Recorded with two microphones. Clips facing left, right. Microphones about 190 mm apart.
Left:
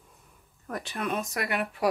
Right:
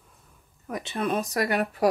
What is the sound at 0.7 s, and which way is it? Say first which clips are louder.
Speech: right 4 dB; 25° right (ahead or behind).